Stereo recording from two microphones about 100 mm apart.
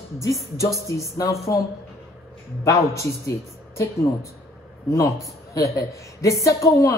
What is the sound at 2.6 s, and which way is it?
Speech, 30° left (ahead or behind).